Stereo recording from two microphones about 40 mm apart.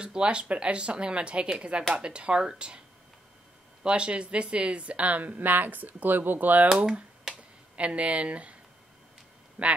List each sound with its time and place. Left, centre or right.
0.0 s speech: right
3.8 s a woman's voice: right
7.0 s a sound: right
9.6 s speech: right